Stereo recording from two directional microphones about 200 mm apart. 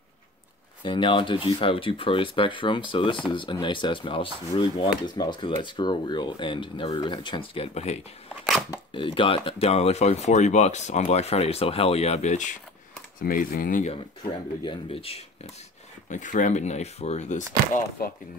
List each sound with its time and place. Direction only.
0.8 s speech: 25° left (ahead or behind); by 14.4 s 50° left (ahead or behind)
14.6 s speech: 25° left (ahead or behind)